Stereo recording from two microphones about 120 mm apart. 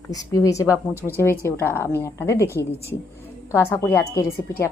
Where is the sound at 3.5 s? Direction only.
20° left (ahead or behind).